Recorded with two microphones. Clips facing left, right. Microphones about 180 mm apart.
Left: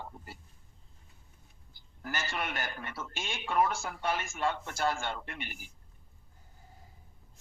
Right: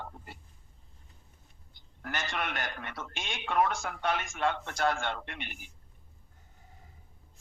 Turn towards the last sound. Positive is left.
turn(degrees=5)  # may be behind; listen again after turning